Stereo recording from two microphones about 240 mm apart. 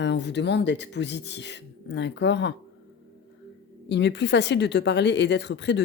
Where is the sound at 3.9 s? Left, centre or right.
Left.